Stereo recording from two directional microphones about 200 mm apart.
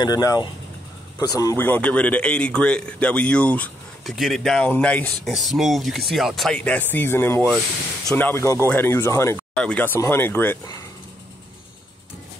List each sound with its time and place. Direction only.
0.0 s a man's voice: 15° left (ahead or behind)